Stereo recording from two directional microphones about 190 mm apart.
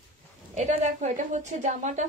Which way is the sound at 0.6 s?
35° right (ahead or behind).